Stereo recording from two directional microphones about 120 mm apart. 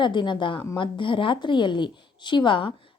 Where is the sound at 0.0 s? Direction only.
40° left (ahead or behind).